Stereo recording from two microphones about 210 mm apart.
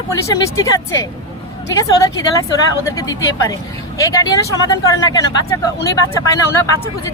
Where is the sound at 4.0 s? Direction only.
15° left (ahead or behind).